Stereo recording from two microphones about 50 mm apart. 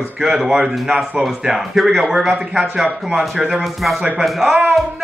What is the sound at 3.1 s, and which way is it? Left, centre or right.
Speech, centre.